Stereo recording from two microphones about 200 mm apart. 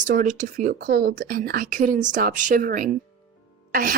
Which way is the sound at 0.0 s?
40° right (ahead or behind).